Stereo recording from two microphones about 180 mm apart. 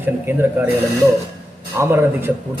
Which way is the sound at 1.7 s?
15° right (ahead or behind).